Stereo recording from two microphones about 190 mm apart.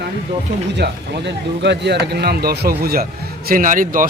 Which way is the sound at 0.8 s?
65° right (ahead or behind).